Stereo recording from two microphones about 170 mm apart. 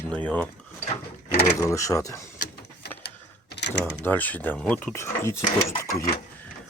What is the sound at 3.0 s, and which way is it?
Mechanisms, 80° left.